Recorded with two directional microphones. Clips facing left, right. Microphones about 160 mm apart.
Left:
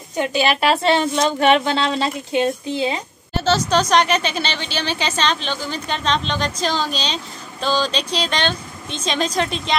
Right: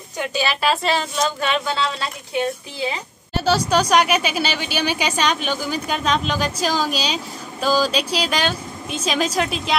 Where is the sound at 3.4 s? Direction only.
10° right (ahead or behind).